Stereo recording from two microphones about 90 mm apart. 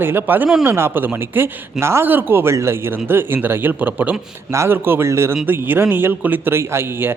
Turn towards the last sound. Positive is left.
turn(degrees=-30)  # may be behind; listen again after turning